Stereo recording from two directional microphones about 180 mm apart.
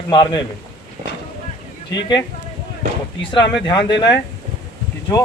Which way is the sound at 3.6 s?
25° left (ahead or behind).